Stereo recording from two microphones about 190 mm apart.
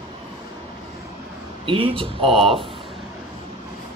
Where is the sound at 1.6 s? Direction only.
30° right (ahead or behind).